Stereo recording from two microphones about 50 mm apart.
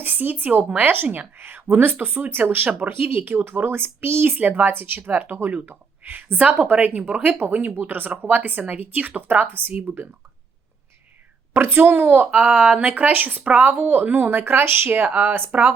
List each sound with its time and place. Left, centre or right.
0.0 s speech: right
2.6 s speech: right
3.0 s speech: right
4.4 s speech: right
11.5 s speech: right
15.5 s speech: right